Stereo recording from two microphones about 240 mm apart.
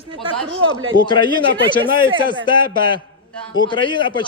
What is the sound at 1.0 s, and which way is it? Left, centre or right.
Speech, centre.